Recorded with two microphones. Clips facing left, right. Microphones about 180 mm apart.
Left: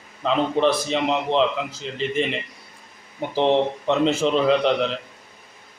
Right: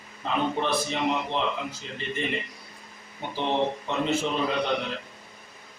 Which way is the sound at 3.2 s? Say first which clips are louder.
Left 7 dB; 90° left.